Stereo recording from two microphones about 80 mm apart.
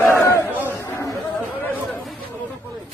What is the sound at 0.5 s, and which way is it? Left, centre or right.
Chatter, right.